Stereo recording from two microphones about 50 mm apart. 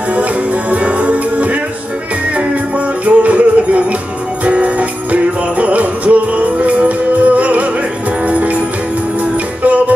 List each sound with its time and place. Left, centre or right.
0.7 s music: right
3.1 s music: right
4.5 s jingle bell: right
9.6 s music: right